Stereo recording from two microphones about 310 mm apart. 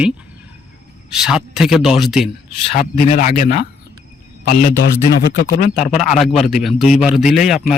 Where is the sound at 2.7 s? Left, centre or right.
Left.